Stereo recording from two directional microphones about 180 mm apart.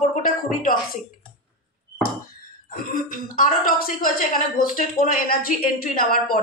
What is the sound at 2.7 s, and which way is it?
Speech, 50° left (ahead or behind).